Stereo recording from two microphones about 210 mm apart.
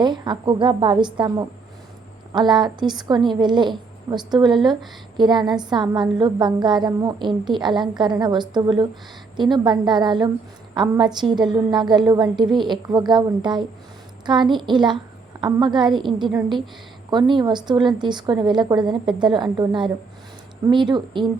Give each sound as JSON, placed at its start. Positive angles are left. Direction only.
{"t": 0.0, "sound": "a woman's voice", "side_deg": -20}